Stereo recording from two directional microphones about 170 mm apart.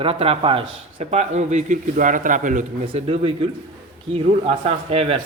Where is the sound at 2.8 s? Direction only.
35° right (ahead or behind).